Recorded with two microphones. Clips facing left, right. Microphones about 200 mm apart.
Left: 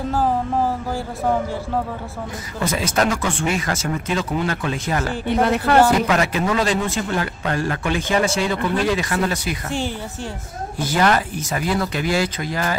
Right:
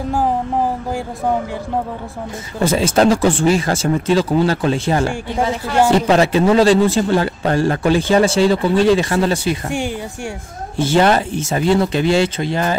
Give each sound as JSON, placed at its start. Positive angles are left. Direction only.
{"t": 0.1, "sound": "music", "side_deg": -15}
{"t": 2.6, "sound": "a man's voice", "side_deg": -30}
{"t": 5.4, "sound": "speech", "side_deg": 60}
{"t": 5.9, "sound": "a man's voice", "side_deg": -30}
{"t": 9.7, "sound": "speech", "side_deg": -15}
{"t": 10.8, "sound": "speech", "side_deg": -25}